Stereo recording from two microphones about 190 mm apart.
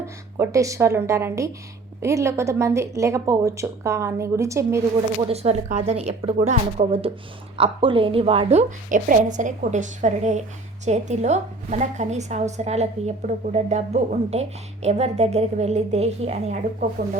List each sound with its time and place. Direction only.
0.0 s a woman's voice: 15° right (ahead or behind)
5.3 s a woman's voice: 35° right (ahead or behind)